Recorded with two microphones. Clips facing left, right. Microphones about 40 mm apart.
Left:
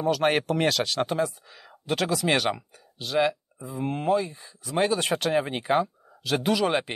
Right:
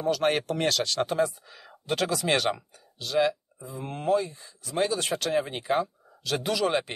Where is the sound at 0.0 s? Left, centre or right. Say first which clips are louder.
Left 2 dB; centre.